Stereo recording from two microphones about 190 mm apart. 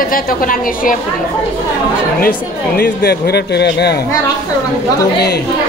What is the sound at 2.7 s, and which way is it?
Speech, 55° left (ahead or behind).